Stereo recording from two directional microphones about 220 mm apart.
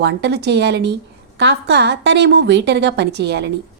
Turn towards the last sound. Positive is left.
turn(degrees=-50)  # may be behind; listen again after turning